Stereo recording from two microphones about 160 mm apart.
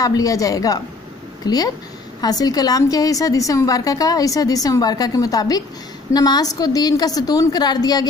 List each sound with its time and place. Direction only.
0.0 s a woman's voice: 20° left (ahead or behind)